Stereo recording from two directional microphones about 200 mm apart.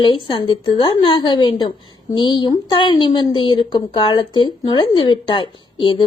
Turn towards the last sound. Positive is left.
turn(degrees=25)  # may be behind; listen again after turning